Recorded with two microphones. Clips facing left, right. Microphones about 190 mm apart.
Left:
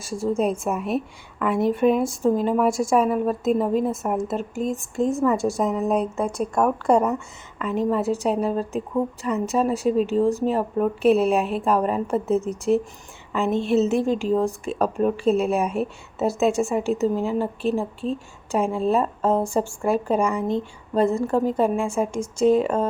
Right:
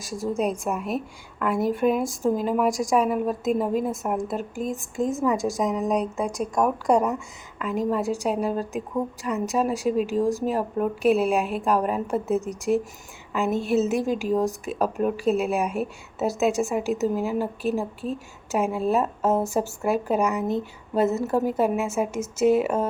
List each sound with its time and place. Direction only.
0.6 s speech: centre (ahead or behind)
2.6 s speech: 15° right (ahead or behind)
2.9 s speech: centre (ahead or behind)